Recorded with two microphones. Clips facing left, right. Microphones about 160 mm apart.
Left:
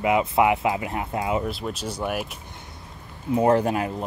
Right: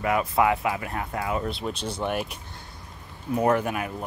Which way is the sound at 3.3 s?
30° left (ahead or behind).